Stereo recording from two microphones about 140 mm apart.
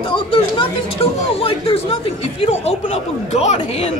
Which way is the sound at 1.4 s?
45° left (ahead or behind).